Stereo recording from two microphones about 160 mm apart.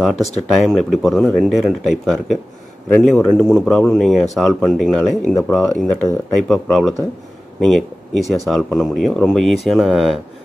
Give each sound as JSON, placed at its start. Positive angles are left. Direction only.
{"t": 0.0, "sound": "speech", "side_deg": 0}